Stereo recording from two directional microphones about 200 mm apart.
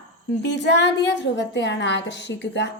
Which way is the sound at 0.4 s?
60° left (ahead or behind).